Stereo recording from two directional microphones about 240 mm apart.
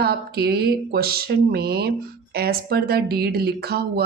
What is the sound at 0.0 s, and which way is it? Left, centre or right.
Speech, right.